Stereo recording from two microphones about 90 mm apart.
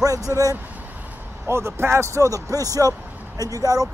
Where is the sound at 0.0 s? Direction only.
40° right (ahead or behind).